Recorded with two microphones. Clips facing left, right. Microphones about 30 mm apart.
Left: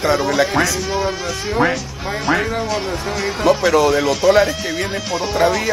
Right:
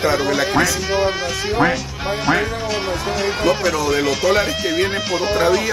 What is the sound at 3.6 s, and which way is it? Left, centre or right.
Speech, centre.